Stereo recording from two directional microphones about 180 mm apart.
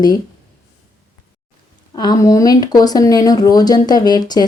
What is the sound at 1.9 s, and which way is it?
Speech, 20° left (ahead or behind).